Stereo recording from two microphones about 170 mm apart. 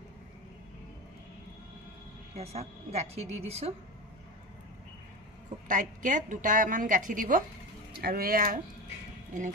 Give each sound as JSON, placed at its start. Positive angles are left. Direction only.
{"t": 2.3, "sound": "a woman's voice", "side_deg": -35}
{"t": 5.7, "sound": "a woman's voice", "side_deg": -50}